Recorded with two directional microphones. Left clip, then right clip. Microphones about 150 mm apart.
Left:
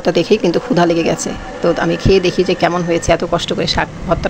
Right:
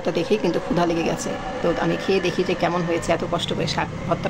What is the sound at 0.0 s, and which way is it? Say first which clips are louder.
Speech: left 8 dB; 30° left (ahead or behind).